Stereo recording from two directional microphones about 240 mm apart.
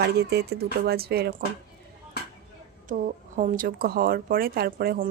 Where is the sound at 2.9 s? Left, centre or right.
Right.